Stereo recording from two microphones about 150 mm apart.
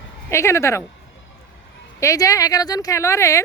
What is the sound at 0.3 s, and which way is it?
Speech, 20° left (ahead or behind).